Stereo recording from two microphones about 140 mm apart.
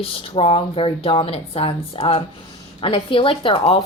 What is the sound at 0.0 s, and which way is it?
Speech, 40° left (ahead or behind).